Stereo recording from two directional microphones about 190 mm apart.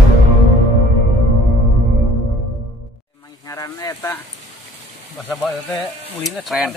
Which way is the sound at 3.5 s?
20° left (ahead or behind).